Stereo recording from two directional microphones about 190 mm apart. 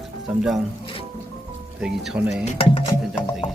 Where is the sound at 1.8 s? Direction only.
5° right (ahead or behind).